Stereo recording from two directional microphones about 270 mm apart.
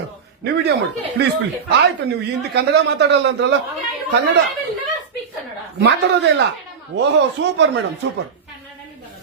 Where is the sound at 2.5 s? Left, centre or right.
Right.